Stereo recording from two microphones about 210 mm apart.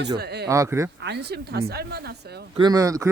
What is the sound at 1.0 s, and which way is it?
A woman's voice, 55° right (ahead or behind).